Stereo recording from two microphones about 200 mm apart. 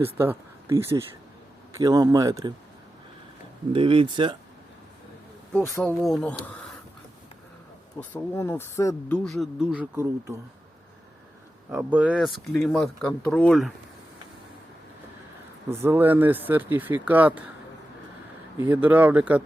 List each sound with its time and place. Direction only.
0.0 s speech: 10° right (ahead or behind)
3.7 s speech: 25° right (ahead or behind)
5.5 s speech: 10° left (ahead or behind)
5.9 s speech: centre (ahead or behind)
7.9 s speech: 10° left (ahead or behind); by 10.3 s 15° right (ahead or behind)
11.7 s speech: 5° right (ahead or behind)
15.7 s speech: 10° right (ahead or behind)
18.5 s speech: 10° right (ahead or behind)